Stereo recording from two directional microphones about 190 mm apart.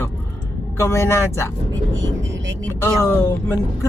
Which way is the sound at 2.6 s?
10° left (ahead or behind).